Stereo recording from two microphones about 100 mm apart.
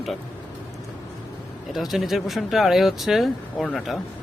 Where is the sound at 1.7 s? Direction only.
Centre (ahead or behind).